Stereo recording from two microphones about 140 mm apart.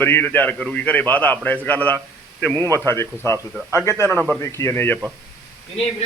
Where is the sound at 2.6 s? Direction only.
20° right (ahead or behind).